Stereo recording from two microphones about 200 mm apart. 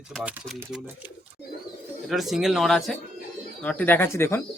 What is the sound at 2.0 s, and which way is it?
Speech, centre (ahead or behind).